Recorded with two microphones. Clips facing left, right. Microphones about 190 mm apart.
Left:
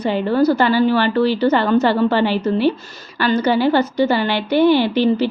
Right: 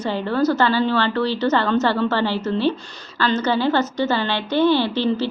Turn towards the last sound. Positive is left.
turn(degrees=15)  # may be behind; listen again after turning